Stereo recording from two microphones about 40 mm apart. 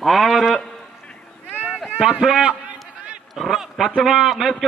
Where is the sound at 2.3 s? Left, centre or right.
Right.